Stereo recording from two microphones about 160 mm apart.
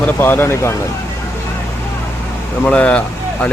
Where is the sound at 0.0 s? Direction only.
10° left (ahead or behind).